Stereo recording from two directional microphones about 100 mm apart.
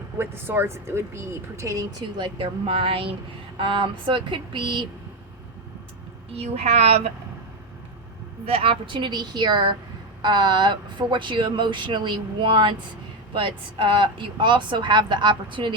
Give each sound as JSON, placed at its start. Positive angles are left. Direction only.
{"t": 0.2, "sound": "speech", "side_deg": -20}
{"t": 2.1, "sound": "speech", "side_deg": -50}
{"t": 2.6, "sound": "speech", "side_deg": -65}
{"t": 6.3, "sound": "a woman's voice", "side_deg": -90}
{"t": 8.4, "sound": "speech", "side_deg": -70}